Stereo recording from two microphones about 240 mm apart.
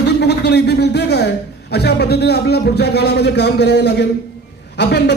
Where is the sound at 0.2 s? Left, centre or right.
Left.